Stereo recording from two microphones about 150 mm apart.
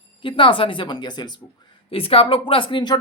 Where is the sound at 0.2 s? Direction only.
35° left (ahead or behind).